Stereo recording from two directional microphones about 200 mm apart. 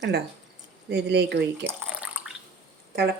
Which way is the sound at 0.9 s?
55° right (ahead or behind).